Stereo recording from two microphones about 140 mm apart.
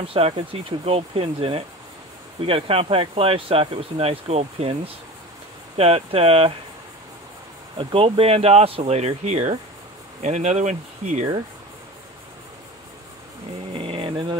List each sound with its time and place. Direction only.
0.0 s speech: 40° right (ahead or behind)
7.7 s speech: 40° right (ahead or behind); by 11.2 s 55° right (ahead or behind)
13.7 s music: 40° right (ahead or behind)